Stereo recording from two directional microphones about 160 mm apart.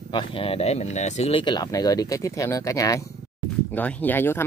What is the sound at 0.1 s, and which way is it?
Speech, 35° left (ahead or behind).